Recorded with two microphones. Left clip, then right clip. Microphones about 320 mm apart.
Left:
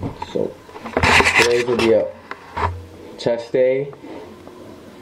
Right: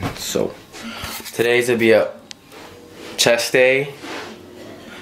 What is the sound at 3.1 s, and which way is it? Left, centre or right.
Speech, right.